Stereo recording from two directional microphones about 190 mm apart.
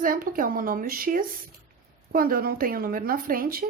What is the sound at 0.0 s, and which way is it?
A woman's voice, 45° right (ahead or behind).